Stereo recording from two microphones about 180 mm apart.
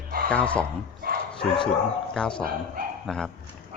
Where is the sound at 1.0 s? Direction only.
55° right (ahead or behind).